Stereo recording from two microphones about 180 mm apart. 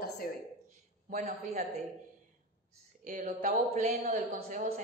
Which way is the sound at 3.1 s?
40° right (ahead or behind).